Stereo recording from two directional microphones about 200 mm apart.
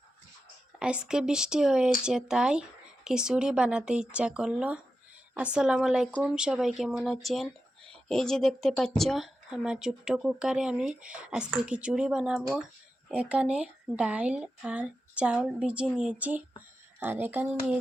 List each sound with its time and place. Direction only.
0.8 s speech: 5° right (ahead or behind)